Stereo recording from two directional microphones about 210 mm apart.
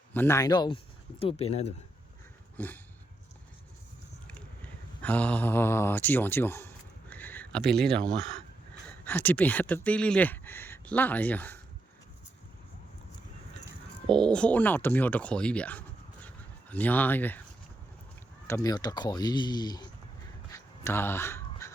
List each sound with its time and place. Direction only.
0.1 s speech: 10° left (ahead or behind); by 1.7 s 30° left (ahead or behind)
2.6 s speech: 10° left (ahead or behind)
4.3 s a sound: 5° left (ahead or behind)
7.7 s speech: 5° left (ahead or behind)
14.1 s speech: 5° left (ahead or behind)
18.4 s speech: 15° left (ahead or behind)
20.5 s crow: 10° left (ahead or behind)